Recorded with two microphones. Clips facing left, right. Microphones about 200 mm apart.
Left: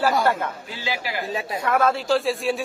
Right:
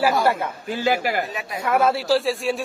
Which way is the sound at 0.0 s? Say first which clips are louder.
Right 1 dB; 5° right (ahead or behind).